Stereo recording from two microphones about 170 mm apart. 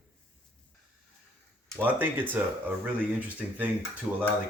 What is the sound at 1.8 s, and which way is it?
Speech, 10° right (ahead or behind).